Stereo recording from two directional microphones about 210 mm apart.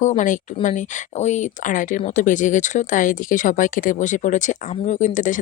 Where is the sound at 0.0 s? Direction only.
35° left (ahead or behind).